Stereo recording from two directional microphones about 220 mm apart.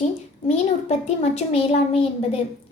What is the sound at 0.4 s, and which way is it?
A child's voice, 30° left (ahead or behind).